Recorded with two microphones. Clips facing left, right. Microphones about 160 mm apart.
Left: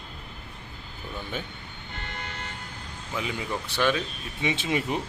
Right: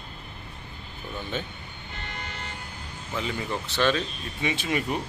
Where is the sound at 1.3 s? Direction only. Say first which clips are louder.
Right 3 dB; 10° left (ahead or behind).